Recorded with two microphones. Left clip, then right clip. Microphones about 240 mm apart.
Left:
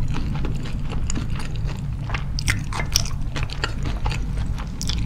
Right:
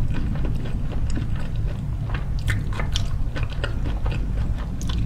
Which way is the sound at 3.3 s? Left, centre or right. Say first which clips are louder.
Left 3 dB; left.